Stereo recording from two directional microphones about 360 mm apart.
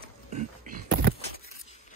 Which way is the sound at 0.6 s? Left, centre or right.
Right.